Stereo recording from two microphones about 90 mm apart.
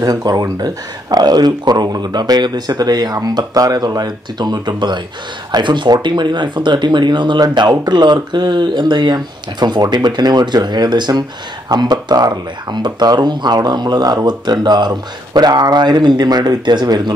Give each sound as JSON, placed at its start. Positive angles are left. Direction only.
{"t": 0.0, "sound": "speech", "side_deg": -45}